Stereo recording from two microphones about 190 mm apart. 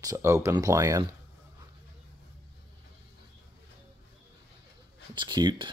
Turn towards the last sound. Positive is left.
turn(degrees=-25)  # may be behind; listen again after turning